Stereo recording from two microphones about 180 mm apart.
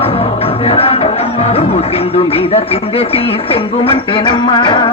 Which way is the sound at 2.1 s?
35° left (ahead or behind).